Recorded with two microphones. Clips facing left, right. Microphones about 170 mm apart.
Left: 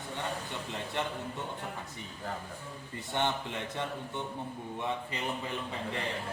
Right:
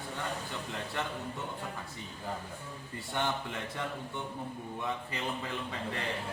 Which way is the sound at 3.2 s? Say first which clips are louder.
Left 2 dB; 20° left (ahead or behind).